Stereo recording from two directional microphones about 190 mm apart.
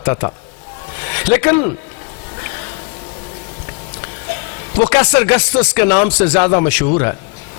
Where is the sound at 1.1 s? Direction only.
15° left (ahead or behind).